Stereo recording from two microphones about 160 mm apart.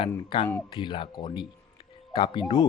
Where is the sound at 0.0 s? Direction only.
30° left (ahead or behind).